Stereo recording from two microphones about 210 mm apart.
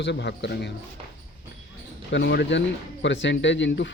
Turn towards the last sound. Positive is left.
turn(degrees=55)  # may be behind; listen again after turning